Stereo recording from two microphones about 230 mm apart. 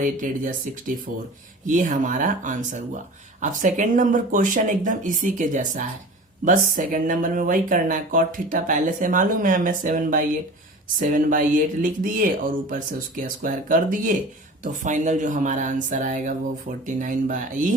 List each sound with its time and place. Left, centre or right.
0.0 s speech: right
1.6 s speech: right